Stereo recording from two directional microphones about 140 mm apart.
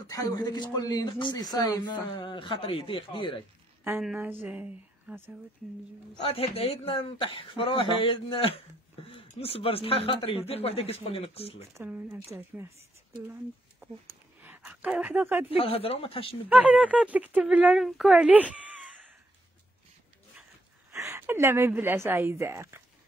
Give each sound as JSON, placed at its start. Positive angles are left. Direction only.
{"t": 0.1, "sound": "speech", "side_deg": 25}
{"t": 4.0, "sound": "speech", "side_deg": -10}
{"t": 6.2, "sound": "speech", "side_deg": 45}
{"t": 11.7, "sound": "speech", "side_deg": -15}
{"t": 14.4, "sound": "speech", "side_deg": -10}
{"t": 15.5, "sound": "speech", "side_deg": 40}
{"t": 16.4, "sound": "speech", "side_deg": -10}
{"t": 20.9, "sound": "a woman's voice", "side_deg": -20}